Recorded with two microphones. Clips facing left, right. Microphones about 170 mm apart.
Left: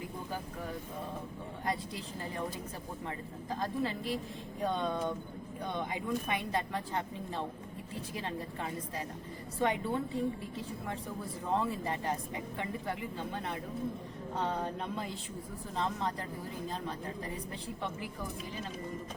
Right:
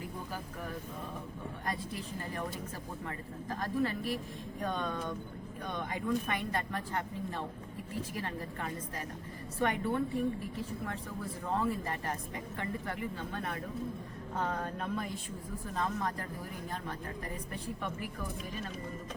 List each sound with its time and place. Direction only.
3.5 s a woman's voice: 20° left (ahead or behind)